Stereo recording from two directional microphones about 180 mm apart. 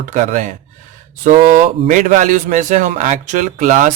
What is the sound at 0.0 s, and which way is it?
Speech, 45° right (ahead or behind).